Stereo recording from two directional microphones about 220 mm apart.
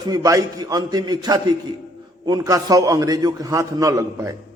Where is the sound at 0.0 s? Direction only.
15° right (ahead or behind).